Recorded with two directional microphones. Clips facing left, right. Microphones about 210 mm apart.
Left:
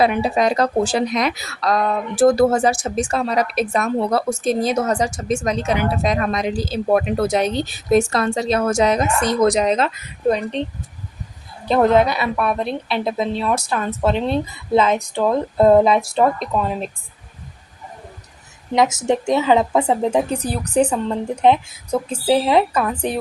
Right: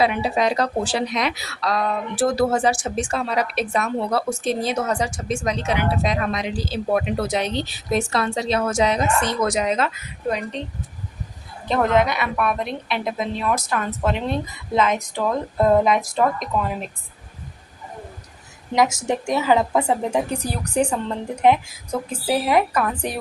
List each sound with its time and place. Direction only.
0.0 s a woman's voice: 45° left (ahead or behind)
11.7 s a woman's voice: 35° left (ahead or behind)
18.7 s a woman's voice: 20° left (ahead or behind)